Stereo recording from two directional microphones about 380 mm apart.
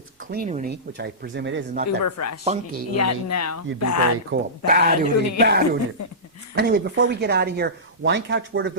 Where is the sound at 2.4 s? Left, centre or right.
Centre.